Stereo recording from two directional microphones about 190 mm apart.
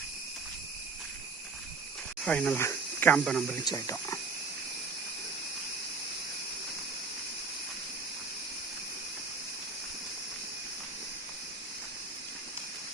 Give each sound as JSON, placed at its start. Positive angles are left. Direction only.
{"t": 2.2, "sound": "speech", "side_deg": 5}
{"t": 3.6, "sound": "speech", "side_deg": 20}